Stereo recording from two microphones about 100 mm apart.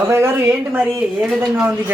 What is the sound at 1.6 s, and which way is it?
Speech, 15° right (ahead or behind).